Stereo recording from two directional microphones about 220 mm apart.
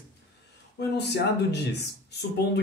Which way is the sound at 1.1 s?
50° left (ahead or behind).